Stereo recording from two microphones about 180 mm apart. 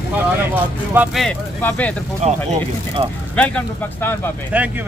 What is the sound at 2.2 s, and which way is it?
Speech, 35° right (ahead or behind).